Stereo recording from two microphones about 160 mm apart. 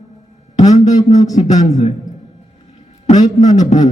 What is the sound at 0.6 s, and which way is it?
A man's voice, 45° left (ahead or behind).